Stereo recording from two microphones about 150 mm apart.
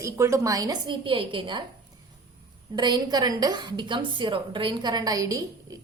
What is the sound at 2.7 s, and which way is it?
A woman's voice, 30° right (ahead or behind).